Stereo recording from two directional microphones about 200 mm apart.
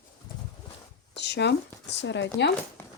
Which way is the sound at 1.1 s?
55° left (ahead or behind).